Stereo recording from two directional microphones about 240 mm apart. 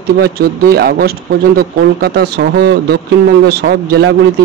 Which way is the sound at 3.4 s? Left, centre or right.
Right.